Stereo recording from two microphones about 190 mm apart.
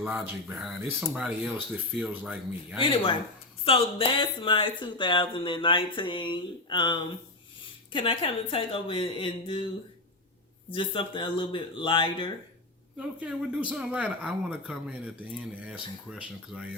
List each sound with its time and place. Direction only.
0.0 s speech: 10° right (ahead or behind)
2.9 s speech: 30° left (ahead or behind)
10.7 s speech: 25° left (ahead or behind)
13.0 s speech: 5° right (ahead or behind)